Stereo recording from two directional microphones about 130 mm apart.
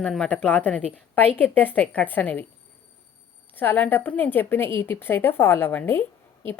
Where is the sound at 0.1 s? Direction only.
10° left (ahead or behind).